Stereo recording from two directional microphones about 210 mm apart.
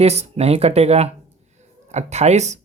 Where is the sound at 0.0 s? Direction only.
30° right (ahead or behind).